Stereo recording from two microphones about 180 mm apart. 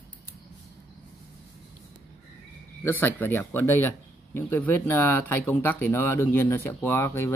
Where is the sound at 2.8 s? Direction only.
10° left (ahead or behind).